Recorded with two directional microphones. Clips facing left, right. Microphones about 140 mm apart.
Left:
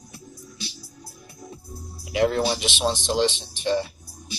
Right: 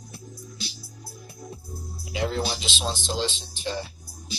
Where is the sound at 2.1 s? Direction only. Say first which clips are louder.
Left 6 dB; 65° left (ahead or behind).